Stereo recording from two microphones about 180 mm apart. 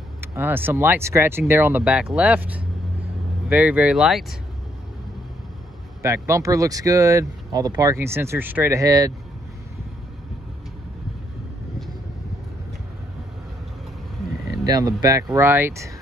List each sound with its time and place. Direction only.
0.2 s speech: 10° right (ahead or behind)
6.0 s speech: 15° right (ahead or behind)
14.6 s speech: 20° right (ahead or behind)